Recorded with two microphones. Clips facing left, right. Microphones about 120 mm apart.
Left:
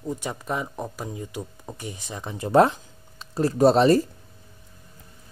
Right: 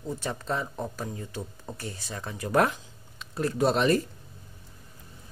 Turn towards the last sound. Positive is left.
turn(degrees=35)  # may be behind; listen again after turning